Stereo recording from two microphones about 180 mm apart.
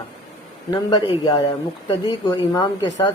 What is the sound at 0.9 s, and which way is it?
A woman's voice, 25° left (ahead or behind).